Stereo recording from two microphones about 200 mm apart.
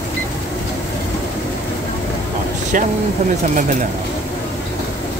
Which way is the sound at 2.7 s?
40° right (ahead or behind).